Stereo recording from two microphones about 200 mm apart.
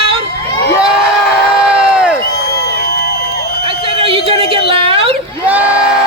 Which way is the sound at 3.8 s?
30° right (ahead or behind).